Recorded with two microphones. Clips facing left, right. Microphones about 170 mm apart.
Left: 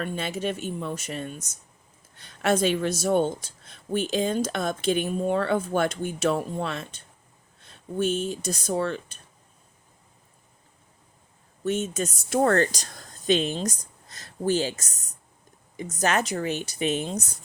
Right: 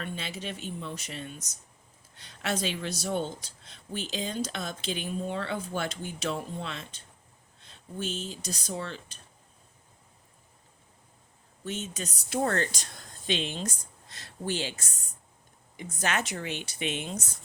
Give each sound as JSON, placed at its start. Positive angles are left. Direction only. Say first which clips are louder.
{"t": 0.0, "sound": "speech", "louder": "left 8 dB", "side_deg": 50}
{"t": 11.6, "sound": "speech", "louder": "left 9 dB", "side_deg": 50}
{"t": 12.7, "sound": "speech", "louder": "left 3 dB", "side_deg": 40}